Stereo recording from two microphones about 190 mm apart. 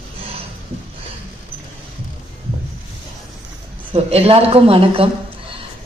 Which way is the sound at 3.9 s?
30° right (ahead or behind).